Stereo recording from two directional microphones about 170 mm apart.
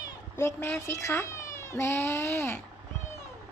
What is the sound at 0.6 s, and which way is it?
A child's voice, 15° left (ahead or behind).